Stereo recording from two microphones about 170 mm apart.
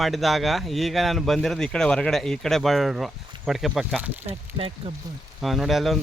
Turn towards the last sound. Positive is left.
turn(degrees=0)  # may be behind; listen again after turning